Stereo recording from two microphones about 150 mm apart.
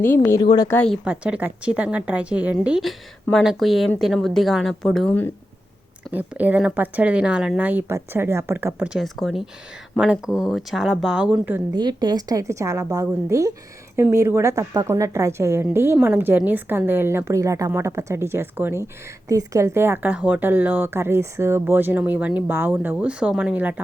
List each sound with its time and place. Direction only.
0.0 s speech: 15° left (ahead or behind)
1.0 s a woman's voice: 10° right (ahead or behind)
6.1 s a woman's voice: 10° right (ahead or behind)
11.7 s a woman's voice: 30° right (ahead or behind); by 23.8 s 10° right (ahead or behind)